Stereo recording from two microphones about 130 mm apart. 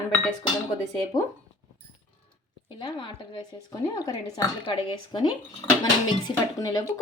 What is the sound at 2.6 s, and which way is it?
A woman's voice, 35° left (ahead or behind).